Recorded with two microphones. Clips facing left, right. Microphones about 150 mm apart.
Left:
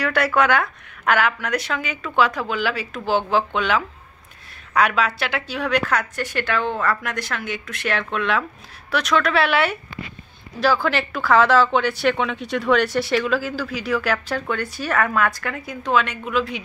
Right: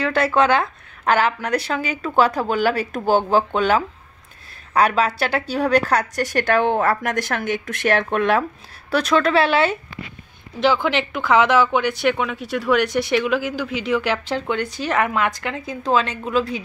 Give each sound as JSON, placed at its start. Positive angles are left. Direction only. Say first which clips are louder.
{"t": 0.0, "sound": "a woman's voice", "louder": "right 2 dB", "side_deg": -25}
{"t": 8.9, "sound": "a woman's voice", "louder": "right 3 dB", "side_deg": -30}